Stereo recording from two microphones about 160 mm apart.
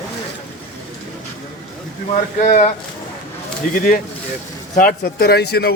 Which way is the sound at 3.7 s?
60° left (ahead or behind).